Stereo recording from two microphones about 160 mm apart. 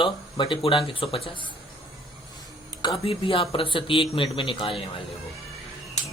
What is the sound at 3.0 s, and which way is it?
Speech, 35° left (ahead or behind).